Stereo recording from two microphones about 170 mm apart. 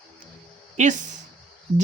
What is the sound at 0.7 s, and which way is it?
Speech, 45° right (ahead or behind).